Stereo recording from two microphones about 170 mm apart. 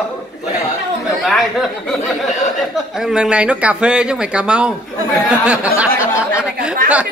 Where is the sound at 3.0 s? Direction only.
5° right (ahead or behind).